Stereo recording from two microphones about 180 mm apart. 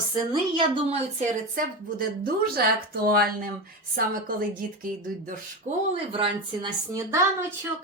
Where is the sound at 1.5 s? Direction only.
55° right (ahead or behind).